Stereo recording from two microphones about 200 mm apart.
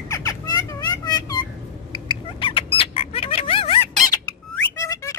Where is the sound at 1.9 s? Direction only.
25° left (ahead or behind).